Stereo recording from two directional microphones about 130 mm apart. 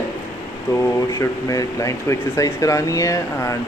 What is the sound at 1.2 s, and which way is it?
Speech, 25° left (ahead or behind).